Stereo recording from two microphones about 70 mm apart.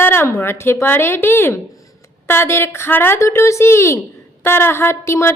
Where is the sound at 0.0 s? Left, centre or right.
Left.